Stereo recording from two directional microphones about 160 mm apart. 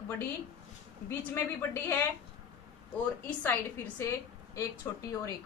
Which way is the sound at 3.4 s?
15° left (ahead or behind).